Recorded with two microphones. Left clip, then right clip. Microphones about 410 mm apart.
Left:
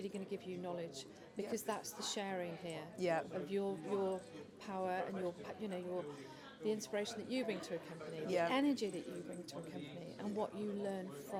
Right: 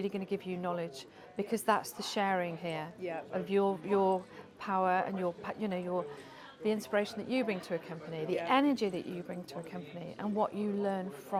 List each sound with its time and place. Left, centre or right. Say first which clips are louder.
0.0 s speech: right 9 dB; right
3.0 s speech: left 2 dB; left
3.4 s speech: right 10 dB; right
10.2 s speech: right 9 dB; right